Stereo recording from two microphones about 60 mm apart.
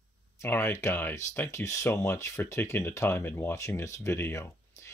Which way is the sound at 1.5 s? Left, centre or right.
Left.